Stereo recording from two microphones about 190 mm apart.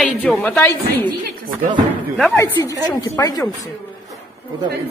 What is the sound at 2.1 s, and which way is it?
Speech, 10° left (ahead or behind).